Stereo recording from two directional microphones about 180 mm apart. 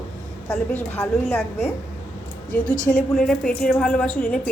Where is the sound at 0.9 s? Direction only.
15° left (ahead or behind).